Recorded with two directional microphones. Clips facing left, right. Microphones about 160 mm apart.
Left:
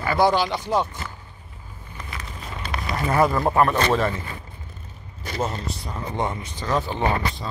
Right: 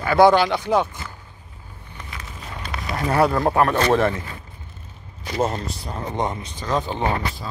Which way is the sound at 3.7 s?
60° right (ahead or behind).